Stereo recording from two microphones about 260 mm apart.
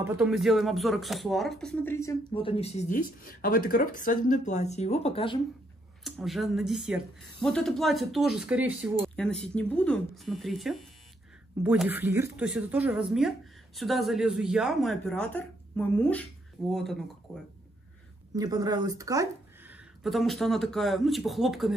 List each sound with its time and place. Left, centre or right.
0.0 s speech: centre; by 5.4 s left
6.0 s speech: centre
18.3 s speech: centre